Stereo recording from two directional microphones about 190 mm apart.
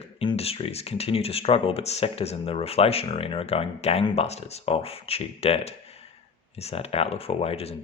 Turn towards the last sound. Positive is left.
turn(degrees=30)  # may be behind; listen again after turning